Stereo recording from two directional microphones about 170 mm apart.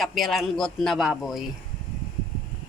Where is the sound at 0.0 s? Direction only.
Centre (ahead or behind).